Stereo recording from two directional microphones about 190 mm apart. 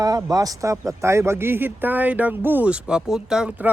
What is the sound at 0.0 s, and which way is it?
Speech, 20° right (ahead or behind).